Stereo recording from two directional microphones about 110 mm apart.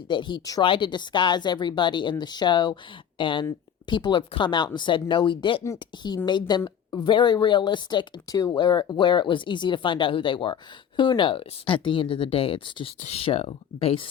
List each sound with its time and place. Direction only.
0.1 s speech: 45° left (ahead or behind)
13.0 s speech: 75° left (ahead or behind); by 14.1 s 55° left (ahead or behind)